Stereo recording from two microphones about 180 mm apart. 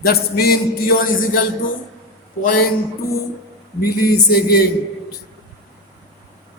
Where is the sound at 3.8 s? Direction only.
60° left (ahead or behind).